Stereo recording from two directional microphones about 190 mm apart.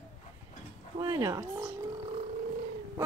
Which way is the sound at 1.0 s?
20° right (ahead or behind).